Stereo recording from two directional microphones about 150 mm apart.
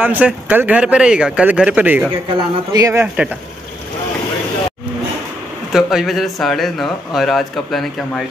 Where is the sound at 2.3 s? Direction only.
25° right (ahead or behind).